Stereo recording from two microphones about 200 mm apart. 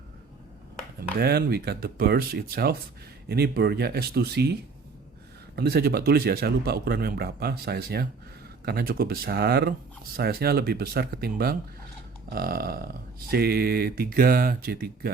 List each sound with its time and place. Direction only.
1.2 s speech: 50° right (ahead or behind)
5.5 s speech: 50° right (ahead or behind)